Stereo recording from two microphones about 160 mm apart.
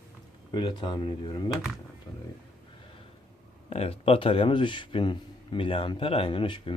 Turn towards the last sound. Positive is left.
turn(degrees=30)  # may be behind; listen again after turning